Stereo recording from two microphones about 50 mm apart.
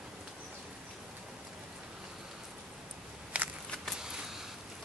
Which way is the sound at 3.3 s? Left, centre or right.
Right.